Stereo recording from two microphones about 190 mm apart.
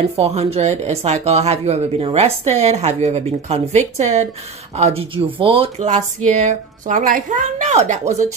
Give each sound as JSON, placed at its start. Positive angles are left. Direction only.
{"t": 0.2, "sound": "speech", "side_deg": -35}